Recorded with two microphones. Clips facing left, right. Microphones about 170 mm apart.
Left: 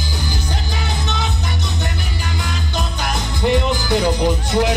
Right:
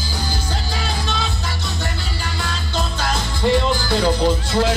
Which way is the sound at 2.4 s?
15° left (ahead or behind).